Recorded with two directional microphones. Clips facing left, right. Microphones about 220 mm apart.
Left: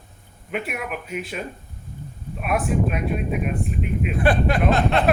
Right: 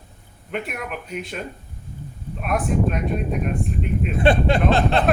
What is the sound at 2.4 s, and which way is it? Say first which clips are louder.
Speech: right 1 dB; 5° left (ahead or behind).